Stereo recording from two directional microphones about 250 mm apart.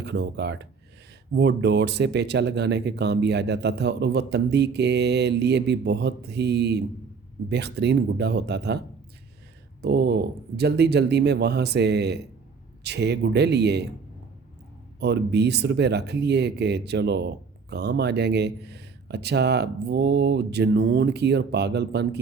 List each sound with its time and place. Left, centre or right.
0.0 s speech: right
9.8 s speech: right
14.9 s speech: right